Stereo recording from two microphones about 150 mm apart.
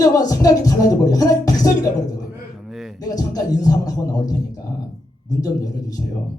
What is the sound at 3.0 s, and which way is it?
Speech, 25° left (ahead or behind).